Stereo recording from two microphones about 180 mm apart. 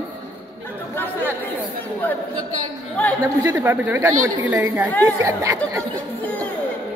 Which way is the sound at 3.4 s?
10° right (ahead or behind).